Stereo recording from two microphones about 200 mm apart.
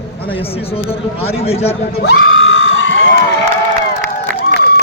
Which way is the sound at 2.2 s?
70° left (ahead or behind).